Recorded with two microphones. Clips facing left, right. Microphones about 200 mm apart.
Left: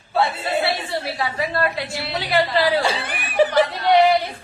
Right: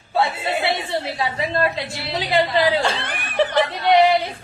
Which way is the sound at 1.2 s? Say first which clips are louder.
Right 1 dB; 20° right (ahead or behind).